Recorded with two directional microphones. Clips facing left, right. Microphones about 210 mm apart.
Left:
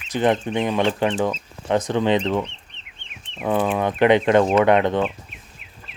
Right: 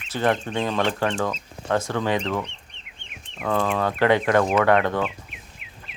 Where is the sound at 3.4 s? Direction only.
15° left (ahead or behind).